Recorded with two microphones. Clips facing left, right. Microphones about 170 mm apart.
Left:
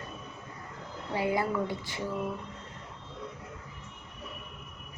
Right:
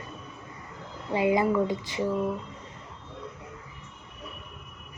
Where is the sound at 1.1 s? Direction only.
15° right (ahead or behind).